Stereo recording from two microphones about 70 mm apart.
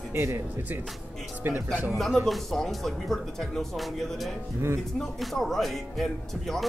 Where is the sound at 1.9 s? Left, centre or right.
Centre.